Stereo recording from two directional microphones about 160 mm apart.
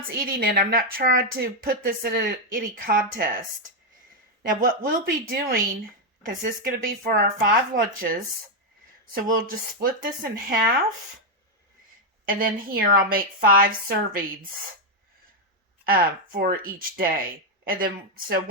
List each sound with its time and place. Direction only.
0.2 s speech: 65° right (ahead or behind)
4.4 s speech: 60° right (ahead or behind)
12.2 s speech: 65° right (ahead or behind)
15.8 s speech: 65° right (ahead or behind)